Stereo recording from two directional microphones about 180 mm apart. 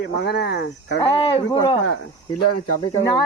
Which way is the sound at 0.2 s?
65° left (ahead or behind).